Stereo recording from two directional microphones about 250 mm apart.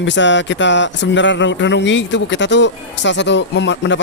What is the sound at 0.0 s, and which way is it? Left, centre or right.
Speech, left.